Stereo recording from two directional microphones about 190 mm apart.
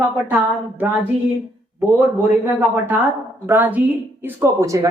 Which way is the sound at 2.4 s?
10° right (ahead or behind).